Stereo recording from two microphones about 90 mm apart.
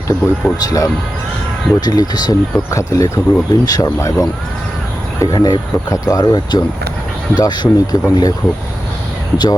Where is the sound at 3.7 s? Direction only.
45° left (ahead or behind).